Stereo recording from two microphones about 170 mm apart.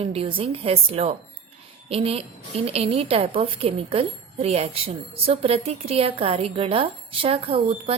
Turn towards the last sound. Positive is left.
turn(degrees=-35)  # may be behind; listen again after turning